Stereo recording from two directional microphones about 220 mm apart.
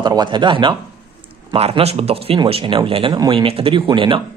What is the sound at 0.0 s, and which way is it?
A man's voice, 20° right (ahead or behind).